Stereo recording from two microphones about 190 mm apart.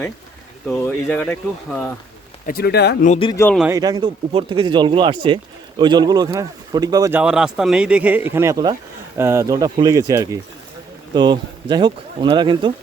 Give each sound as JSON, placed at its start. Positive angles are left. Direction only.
{"t": 0.8, "sound": "speech", "side_deg": 10}
{"t": 2.5, "sound": "speech", "side_deg": 55}
{"t": 3.3, "sound": "speech", "side_deg": 10}
{"t": 3.7, "sound": "speech", "side_deg": -20}
{"t": 7.2, "sound": "speech", "side_deg": -5}